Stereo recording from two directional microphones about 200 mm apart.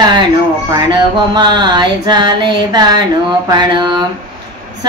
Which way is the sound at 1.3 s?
20° right (ahead or behind).